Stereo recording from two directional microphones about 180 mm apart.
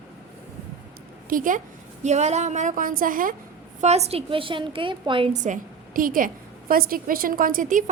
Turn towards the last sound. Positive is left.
turn(degrees=-50)  # may be behind; listen again after turning